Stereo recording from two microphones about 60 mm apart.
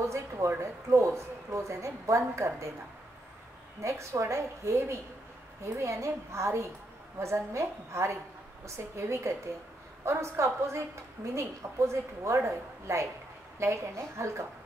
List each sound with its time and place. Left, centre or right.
0.0 s a sound: right
0.6 s a woman's voice: right
3.8 s a woman's voice: right
11.9 s a woman's voice: right